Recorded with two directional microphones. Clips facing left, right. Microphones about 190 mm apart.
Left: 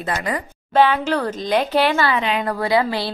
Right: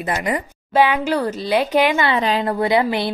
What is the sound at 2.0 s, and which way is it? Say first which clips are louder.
Speech: right 2 dB; 35° right (ahead or behind).